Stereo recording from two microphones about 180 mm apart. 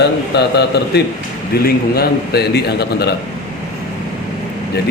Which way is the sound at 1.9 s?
60° left (ahead or behind).